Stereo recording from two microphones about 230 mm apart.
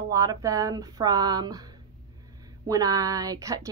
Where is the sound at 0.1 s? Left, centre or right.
Centre.